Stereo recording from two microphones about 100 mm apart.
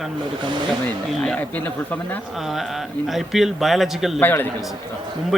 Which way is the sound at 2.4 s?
Centre (ahead or behind).